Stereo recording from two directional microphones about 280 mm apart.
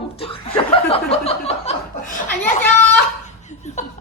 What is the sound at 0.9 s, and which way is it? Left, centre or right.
Chuckle, left.